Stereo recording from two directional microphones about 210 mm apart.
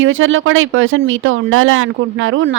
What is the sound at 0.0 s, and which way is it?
Speech, 70° right (ahead or behind).